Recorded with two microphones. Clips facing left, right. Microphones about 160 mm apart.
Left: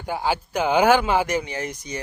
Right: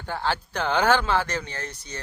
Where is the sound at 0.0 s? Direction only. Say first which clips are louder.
Left 3 dB; 10° left (ahead or behind).